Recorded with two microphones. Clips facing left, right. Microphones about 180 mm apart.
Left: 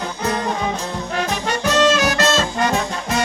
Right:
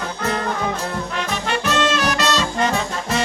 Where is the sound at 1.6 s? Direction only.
40° left (ahead or behind).